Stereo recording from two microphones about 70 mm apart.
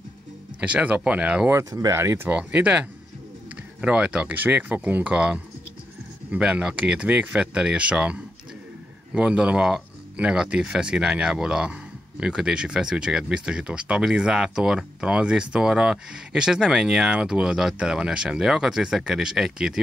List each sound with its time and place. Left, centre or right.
0.6 s speech: centre
1.6 s speech: right
2.0 s speech: right
2.3 s speech: centre